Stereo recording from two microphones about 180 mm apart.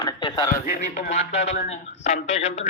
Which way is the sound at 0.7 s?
45° left (ahead or behind).